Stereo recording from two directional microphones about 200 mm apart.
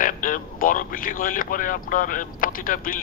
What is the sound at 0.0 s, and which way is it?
Speech, 45° left (ahead or behind).